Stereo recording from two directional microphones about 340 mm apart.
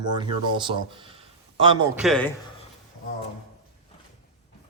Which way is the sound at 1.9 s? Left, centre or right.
Centre.